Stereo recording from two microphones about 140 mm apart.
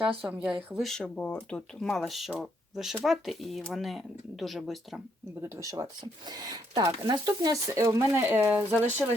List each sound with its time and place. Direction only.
0.0 s speech: 10° right (ahead or behind)
5.4 s speech: 20° right (ahead or behind)